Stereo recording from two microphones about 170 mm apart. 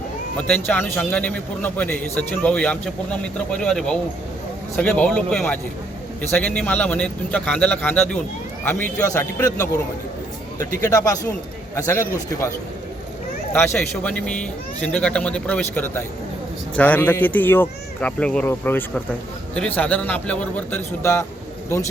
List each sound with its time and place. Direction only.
0.3 s a man's voice: 5° left (ahead or behind)
10.6 s speech: 50° right (ahead or behind)
10.8 s a man's voice: 20° left (ahead or behind)
13.7 s a man's voice: 5° left (ahead or behind)